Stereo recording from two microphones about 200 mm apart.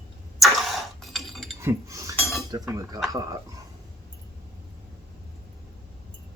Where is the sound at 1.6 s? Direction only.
15° right (ahead or behind).